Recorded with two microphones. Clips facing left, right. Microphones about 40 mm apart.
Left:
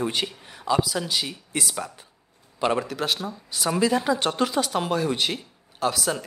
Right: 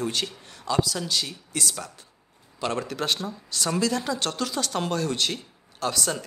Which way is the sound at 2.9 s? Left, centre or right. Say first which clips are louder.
Left 1 dB; centre.